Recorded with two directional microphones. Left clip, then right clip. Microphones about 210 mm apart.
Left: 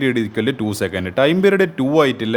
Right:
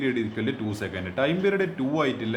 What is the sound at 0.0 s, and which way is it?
A man's voice, 50° left (ahead or behind).